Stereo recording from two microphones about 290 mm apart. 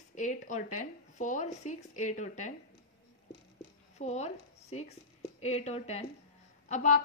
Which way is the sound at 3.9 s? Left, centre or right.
Left.